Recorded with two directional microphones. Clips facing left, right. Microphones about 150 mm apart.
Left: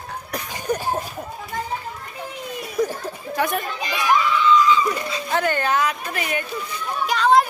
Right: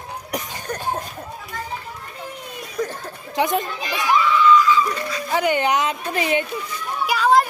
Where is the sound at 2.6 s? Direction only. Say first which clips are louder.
Left 4 dB; 10° left (ahead or behind).